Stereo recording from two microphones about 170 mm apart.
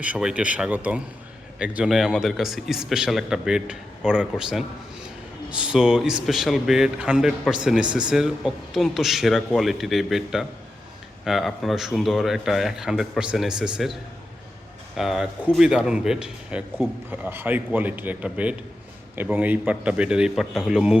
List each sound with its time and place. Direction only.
0.0 s a man's voice: 5° right (ahead or behind)
14.9 s a man's voice: centre (ahead or behind)